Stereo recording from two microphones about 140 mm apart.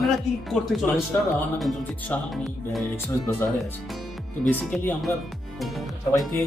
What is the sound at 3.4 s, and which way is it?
Speech, 15° left (ahead or behind).